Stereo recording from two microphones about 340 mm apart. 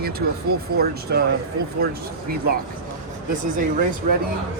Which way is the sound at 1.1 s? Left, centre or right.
Right.